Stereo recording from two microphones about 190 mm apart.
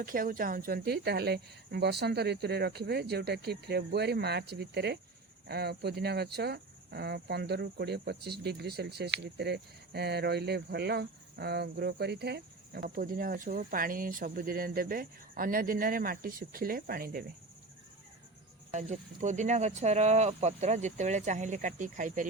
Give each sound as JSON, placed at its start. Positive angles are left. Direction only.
{"t": 0.0, "sound": "speech", "side_deg": -50}
{"t": 18.7, "sound": "speech", "side_deg": -40}